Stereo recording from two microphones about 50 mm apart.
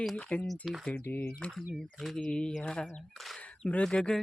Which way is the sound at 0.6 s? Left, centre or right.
Centre.